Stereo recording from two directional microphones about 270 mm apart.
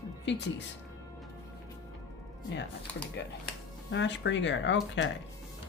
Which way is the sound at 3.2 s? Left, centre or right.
Left.